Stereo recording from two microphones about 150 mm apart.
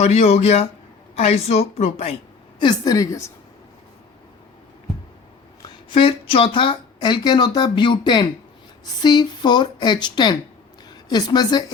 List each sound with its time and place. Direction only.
0.0 s a woman's voice: 45° left (ahead or behind)
2.6 s speech: 25° left (ahead or behind)
5.6 s speech: 35° left (ahead or behind)